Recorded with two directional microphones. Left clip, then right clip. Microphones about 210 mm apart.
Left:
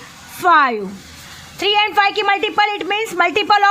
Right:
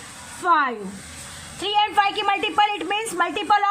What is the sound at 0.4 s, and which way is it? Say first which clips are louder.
A woman's voice: left 7 dB; 40° left (ahead or behind).